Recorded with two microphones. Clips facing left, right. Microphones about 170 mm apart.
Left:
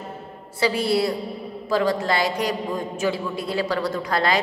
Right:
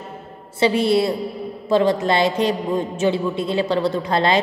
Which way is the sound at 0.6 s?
25° right (ahead or behind).